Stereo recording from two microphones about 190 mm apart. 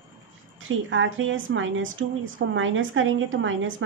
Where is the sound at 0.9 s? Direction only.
90° right.